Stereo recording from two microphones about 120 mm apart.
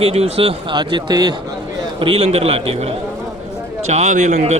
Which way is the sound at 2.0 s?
50° right (ahead or behind).